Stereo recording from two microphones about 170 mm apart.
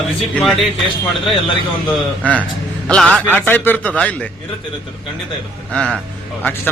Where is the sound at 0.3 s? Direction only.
Centre (ahead or behind).